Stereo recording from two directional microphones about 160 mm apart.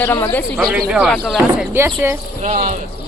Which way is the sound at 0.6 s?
5° right (ahead or behind).